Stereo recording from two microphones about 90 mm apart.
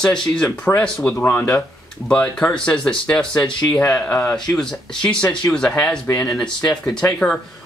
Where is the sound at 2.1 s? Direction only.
15° left (ahead or behind).